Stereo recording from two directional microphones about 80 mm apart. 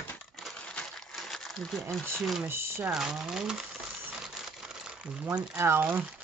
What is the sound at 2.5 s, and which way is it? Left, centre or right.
Speech, right.